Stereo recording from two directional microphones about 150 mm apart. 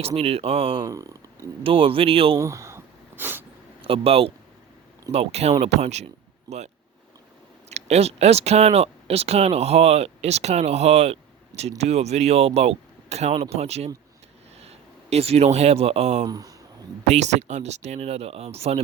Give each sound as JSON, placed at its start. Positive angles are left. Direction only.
{"t": 0.0, "sound": "speech", "side_deg": -40}
{"t": 0.8, "sound": "speech", "side_deg": -20}
{"t": 1.6, "sound": "speech", "side_deg": -35}
{"t": 2.4, "sound": "a sound", "side_deg": -20}
{"t": 3.8, "sound": "speech", "side_deg": -40}
{"t": 6.5, "sound": "speech", "side_deg": -25}
{"t": 7.7, "sound": "speech", "side_deg": -45}
{"t": 16.2, "sound": "speech", "side_deg": -25}
{"t": 17.0, "sound": "speech", "side_deg": -50}